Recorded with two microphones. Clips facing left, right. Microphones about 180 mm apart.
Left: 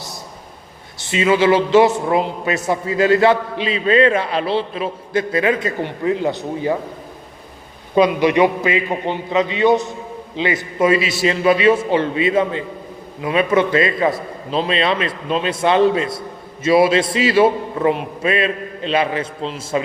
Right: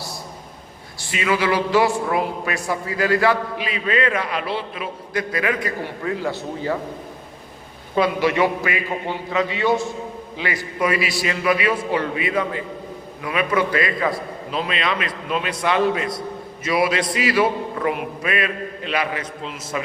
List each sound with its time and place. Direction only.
0.9 s a man's voice: 25° left (ahead or behind)
7.9 s a man's voice: 20° left (ahead or behind)